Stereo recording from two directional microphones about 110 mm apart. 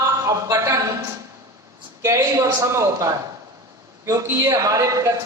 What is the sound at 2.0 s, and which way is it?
A man's voice, 30° right (ahead or behind).